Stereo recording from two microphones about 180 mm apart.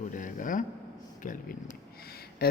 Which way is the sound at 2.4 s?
60° left (ahead or behind).